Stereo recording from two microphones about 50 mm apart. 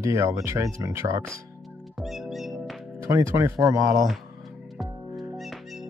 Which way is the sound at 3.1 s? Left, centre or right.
Right.